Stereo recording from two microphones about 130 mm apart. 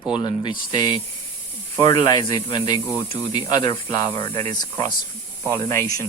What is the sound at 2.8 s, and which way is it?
Speech, 15° left (ahead or behind).